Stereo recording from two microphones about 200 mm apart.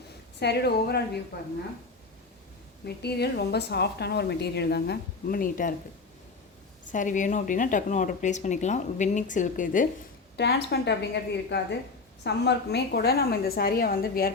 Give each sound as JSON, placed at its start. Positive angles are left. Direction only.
{"t": 0.3, "sound": "a woman's voice", "side_deg": 55}
{"t": 2.8, "sound": "a woman's voice", "side_deg": 55}
{"t": 6.9, "sound": "speech", "side_deg": 40}
{"t": 10.3, "sound": "a woman's voice", "side_deg": 55}